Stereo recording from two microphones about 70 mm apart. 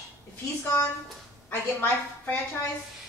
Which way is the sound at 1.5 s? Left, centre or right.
Left.